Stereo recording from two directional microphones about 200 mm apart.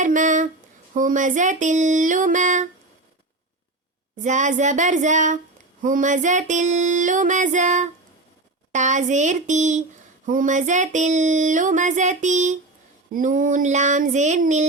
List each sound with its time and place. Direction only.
0.0 s a sound: 40° right (ahead or behind)
0.9 s female singing: 40° right (ahead or behind)
4.2 s female singing: 40° right (ahead or behind)